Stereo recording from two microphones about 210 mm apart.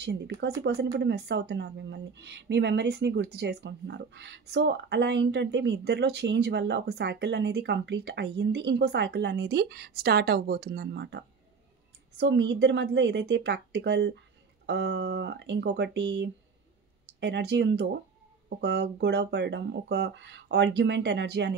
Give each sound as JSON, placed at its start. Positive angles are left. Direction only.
{"t": 0.0, "sound": "speech", "side_deg": -55}